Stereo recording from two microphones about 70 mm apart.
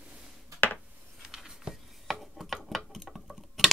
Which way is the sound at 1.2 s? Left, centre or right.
Centre.